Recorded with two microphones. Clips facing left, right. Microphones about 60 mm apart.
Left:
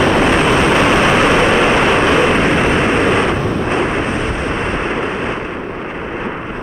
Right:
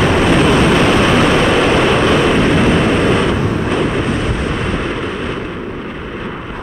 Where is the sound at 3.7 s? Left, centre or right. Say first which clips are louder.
Even; left.